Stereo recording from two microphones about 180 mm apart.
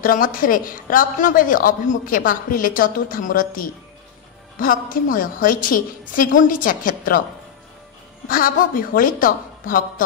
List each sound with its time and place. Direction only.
0.0 s a woman's voice: 50° left (ahead or behind)
8.3 s a woman's voice: 50° left (ahead or behind)